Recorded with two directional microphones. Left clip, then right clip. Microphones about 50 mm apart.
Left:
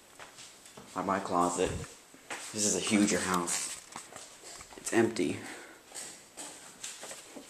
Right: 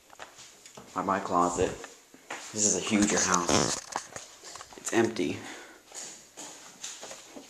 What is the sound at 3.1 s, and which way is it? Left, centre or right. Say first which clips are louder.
Speech: right 5 dB; left.